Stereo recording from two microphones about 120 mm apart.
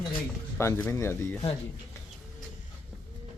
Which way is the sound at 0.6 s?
20° left (ahead or behind).